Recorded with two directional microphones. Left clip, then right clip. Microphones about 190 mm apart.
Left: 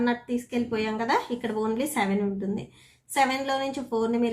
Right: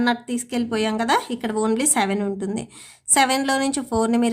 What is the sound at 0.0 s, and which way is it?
A woman's voice, 40° right (ahead or behind).